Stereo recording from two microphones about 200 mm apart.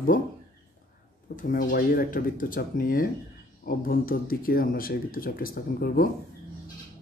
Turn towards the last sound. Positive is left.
turn(degrees=45)  # may be behind; listen again after turning